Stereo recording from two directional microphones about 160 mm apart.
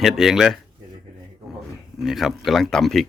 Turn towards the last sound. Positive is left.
turn(degrees=0)  # may be behind; listen again after turning